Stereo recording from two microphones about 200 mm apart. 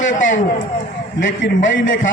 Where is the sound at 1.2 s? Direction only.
70° left (ahead or behind).